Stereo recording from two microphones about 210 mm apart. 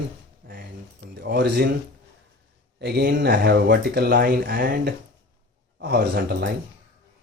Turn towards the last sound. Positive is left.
turn(degrees=-50)  # may be behind; listen again after turning